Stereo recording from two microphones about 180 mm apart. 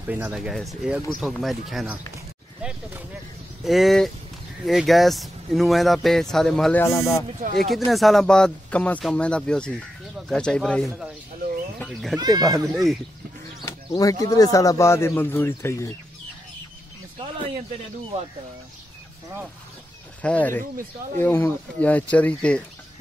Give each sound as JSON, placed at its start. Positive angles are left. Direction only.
{"t": 0.0, "sound": "speech", "side_deg": -10}
{"t": 3.6, "sound": "speech", "side_deg": 0}
{"t": 7.5, "sound": "speech", "side_deg": 0}
{"t": 12.4, "sound": "speech", "side_deg": -20}
{"t": 13.7, "sound": "speech", "side_deg": 20}
{"t": 20.2, "sound": "speech", "side_deg": 10}